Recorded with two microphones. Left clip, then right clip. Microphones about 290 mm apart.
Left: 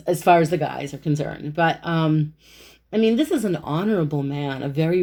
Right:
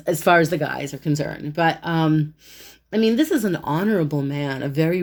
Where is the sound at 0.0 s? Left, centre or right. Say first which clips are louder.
Even; right.